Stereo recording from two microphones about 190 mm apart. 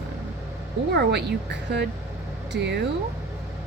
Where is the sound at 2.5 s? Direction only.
65° right (ahead or behind).